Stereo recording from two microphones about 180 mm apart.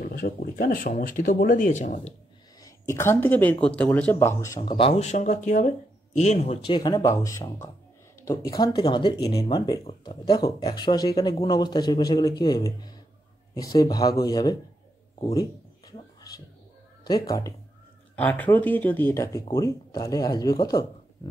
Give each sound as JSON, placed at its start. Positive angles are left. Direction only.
{"t": 0.0, "sound": "speech", "side_deg": 55}
{"t": 2.6, "sound": "speech", "side_deg": 15}
{"t": 4.6, "sound": "speech", "side_deg": 30}
{"t": 16.2, "sound": "a sound", "side_deg": 20}
{"t": 17.1, "sound": "speech", "side_deg": 20}
{"t": 18.1, "sound": "speech", "side_deg": 10}